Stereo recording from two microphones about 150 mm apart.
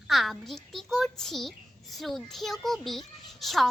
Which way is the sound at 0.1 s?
Centre (ahead or behind).